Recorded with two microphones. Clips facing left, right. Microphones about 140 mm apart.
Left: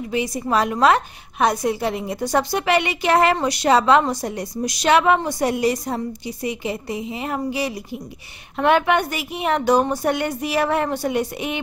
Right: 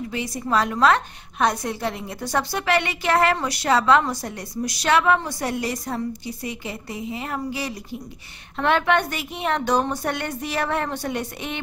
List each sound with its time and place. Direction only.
0.1 s a woman's voice: 15° left (ahead or behind)